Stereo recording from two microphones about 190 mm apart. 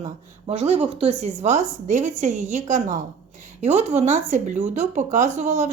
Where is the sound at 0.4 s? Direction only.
35° right (ahead or behind).